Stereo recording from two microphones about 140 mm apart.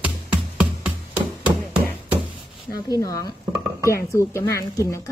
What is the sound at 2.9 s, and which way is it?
A woman's voice, 25° left (ahead or behind).